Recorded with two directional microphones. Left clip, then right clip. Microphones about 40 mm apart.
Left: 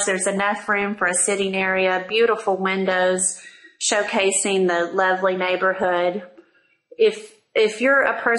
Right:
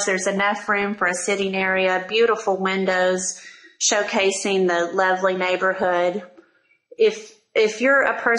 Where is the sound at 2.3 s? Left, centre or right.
Centre.